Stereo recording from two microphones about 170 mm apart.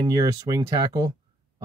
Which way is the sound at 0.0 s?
20° right (ahead or behind).